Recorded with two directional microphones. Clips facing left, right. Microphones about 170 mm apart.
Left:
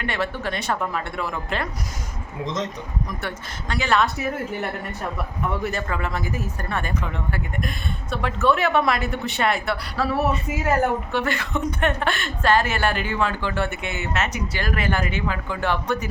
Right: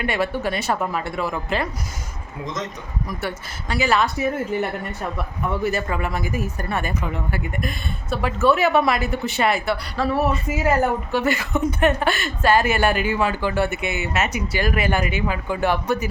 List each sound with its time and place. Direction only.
0.0 s a woman's voice: 10° right (ahead or behind)
2.4 s a man's voice: 30° left (ahead or behind)
3.1 s a woman's voice: 5° right (ahead or behind)